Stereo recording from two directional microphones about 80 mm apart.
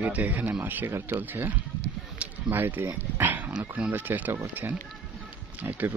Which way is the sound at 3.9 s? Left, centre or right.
Right.